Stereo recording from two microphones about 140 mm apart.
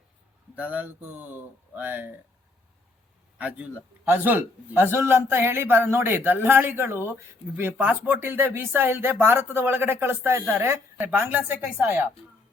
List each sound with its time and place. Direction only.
0.5 s a man's voice: 10° right (ahead or behind)
3.3 s a man's voice: 10° right (ahead or behind)